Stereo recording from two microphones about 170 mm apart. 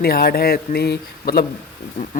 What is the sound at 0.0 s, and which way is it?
A man's voice, 65° left (ahead or behind).